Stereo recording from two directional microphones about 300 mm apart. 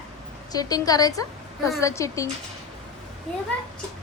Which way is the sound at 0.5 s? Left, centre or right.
Centre.